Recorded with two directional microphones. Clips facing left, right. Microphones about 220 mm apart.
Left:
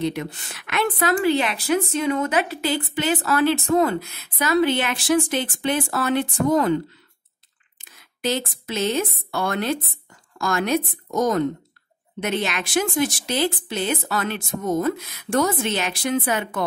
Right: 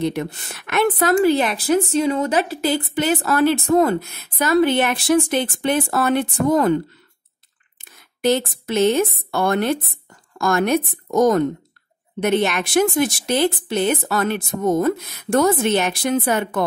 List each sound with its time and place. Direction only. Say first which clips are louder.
0.0 s a woman's voice: right 3 dB; 55° right (ahead or behind)
8.2 s a woman's voice: right 6 dB; 55° right (ahead or behind)